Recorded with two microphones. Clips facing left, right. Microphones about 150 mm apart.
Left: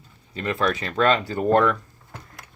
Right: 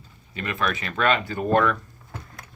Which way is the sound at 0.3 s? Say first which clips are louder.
Left 3 dB; 30° left (ahead or behind).